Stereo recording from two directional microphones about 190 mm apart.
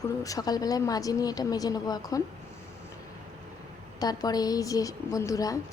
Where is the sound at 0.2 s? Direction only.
20° left (ahead or behind).